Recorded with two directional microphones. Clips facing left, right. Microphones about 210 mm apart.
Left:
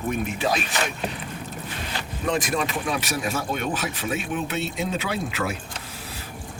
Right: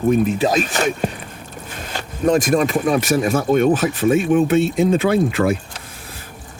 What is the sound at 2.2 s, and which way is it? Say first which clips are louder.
Speech: right 10 dB; 45° right (ahead or behind).